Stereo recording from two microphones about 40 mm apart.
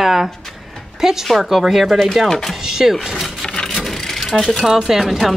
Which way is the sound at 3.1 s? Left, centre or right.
Centre.